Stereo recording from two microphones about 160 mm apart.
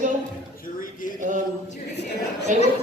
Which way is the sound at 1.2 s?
50° right (ahead or behind).